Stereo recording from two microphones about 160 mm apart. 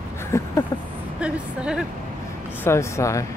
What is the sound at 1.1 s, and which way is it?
Speech, 5° right (ahead or behind).